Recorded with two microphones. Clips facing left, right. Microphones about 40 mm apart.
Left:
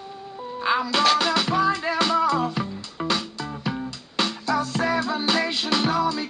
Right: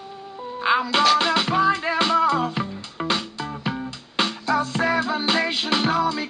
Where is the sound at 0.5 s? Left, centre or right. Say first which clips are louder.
Right 2 dB; centre.